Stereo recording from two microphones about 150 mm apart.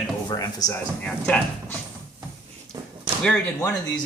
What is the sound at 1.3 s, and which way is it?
Speech, 10° left (ahead or behind).